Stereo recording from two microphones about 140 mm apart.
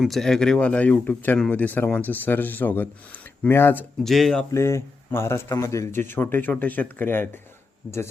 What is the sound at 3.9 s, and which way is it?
Speech, centre (ahead or behind).